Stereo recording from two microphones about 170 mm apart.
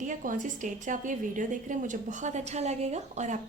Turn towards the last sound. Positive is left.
turn(degrees=-45)  # may be behind; listen again after turning